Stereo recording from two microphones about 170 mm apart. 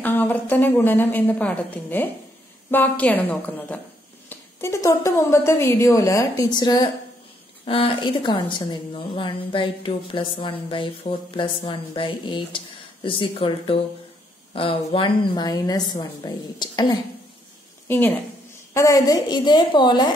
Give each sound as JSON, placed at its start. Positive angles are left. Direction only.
{"t": 0.0, "sound": "a woman's voice", "side_deg": 10}
{"t": 17.8, "sound": "a woman's voice", "side_deg": 10}